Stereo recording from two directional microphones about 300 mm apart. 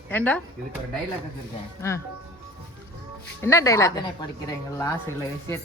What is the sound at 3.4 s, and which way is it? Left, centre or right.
A woman's voice, centre.